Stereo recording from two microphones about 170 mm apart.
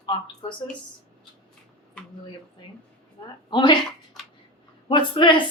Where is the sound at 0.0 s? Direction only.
25° left (ahead or behind).